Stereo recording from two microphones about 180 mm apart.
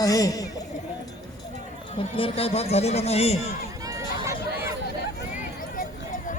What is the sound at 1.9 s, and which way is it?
A man's voice, 30° left (ahead or behind).